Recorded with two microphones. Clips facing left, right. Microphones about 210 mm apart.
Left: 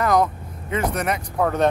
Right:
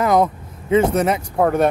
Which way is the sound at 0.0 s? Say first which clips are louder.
Right 3 dB; 25° right (ahead or behind).